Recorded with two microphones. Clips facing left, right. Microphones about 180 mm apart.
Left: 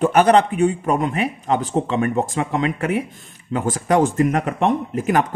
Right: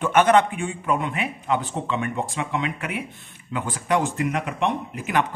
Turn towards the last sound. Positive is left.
turn(degrees=45)  # may be behind; listen again after turning